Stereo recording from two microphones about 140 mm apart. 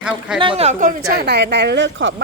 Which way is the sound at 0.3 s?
40° right (ahead or behind).